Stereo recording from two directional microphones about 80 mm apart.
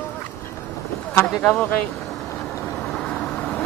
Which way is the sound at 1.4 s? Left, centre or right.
Centre.